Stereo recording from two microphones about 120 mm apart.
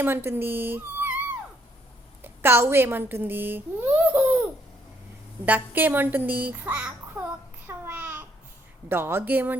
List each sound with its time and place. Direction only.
0.0 s a child's voice: 20° right (ahead or behind)
2.2 s speech: 20° right (ahead or behind)
5.5 s a child's voice: 15° right (ahead or behind)
7.7 s a sound: 15° right (ahead or behind)
8.9 s a child's voice: 20° right (ahead or behind)